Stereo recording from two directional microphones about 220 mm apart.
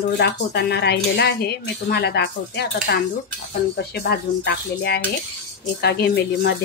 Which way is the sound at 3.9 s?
45° left (ahead or behind).